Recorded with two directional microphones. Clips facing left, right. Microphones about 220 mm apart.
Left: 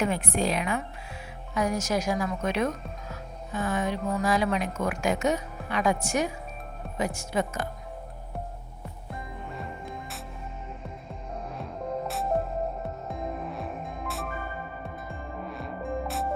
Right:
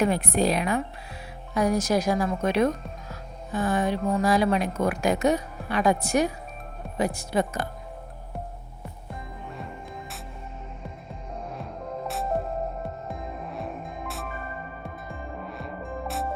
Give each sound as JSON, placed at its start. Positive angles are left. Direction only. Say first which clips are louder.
{"t": 0.0, "sound": "speech", "louder": "right 4 dB", "side_deg": -35}
{"t": 11.5, "sound": "music", "louder": "left 4 dB", "side_deg": 0}